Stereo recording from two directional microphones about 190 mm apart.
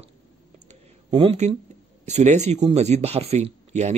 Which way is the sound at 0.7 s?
30° right (ahead or behind).